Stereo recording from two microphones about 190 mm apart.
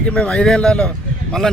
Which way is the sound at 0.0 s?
5° left (ahead or behind).